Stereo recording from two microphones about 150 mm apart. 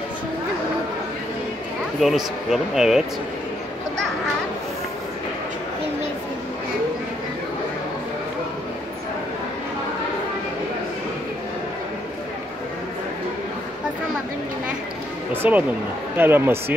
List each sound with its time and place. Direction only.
2.0 s speech: centre (ahead or behind)
15.4 s speech: 10° right (ahead or behind)